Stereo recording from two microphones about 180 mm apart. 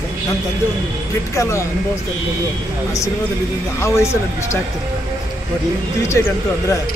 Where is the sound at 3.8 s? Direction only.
15° left (ahead or behind).